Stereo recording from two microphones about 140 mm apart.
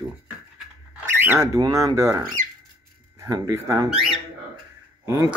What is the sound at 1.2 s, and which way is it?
Speech, 20° right (ahead or behind).